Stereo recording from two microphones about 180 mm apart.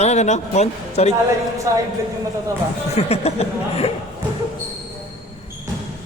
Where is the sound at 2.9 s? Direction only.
35° left (ahead or behind).